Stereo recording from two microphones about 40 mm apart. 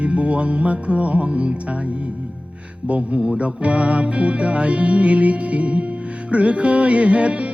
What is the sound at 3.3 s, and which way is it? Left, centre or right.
Music, right.